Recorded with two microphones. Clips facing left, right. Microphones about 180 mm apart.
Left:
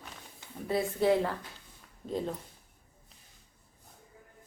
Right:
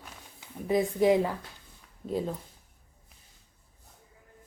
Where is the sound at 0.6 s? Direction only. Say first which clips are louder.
Right 4 dB; 15° right (ahead or behind).